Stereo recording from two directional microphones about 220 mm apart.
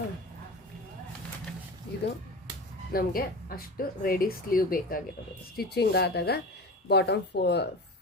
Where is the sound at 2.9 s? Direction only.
40° left (ahead or behind).